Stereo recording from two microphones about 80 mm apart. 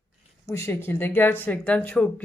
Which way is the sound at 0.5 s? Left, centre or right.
Left.